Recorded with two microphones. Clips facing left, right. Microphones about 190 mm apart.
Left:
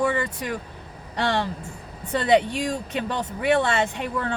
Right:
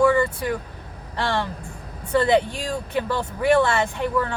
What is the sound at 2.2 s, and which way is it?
A woman's voice, 20° left (ahead or behind).